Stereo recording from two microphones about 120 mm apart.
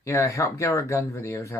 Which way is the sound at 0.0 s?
25° left (ahead or behind).